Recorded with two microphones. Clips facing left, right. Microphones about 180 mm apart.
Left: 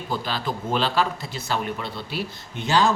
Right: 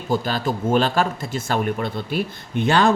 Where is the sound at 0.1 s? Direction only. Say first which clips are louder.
Right 6 dB; 45° right (ahead or behind).